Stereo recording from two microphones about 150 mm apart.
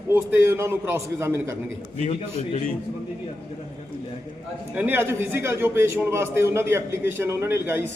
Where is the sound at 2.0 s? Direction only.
45° left (ahead or behind).